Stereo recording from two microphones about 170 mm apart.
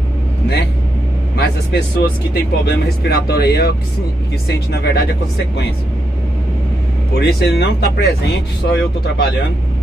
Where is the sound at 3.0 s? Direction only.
65° left (ahead or behind).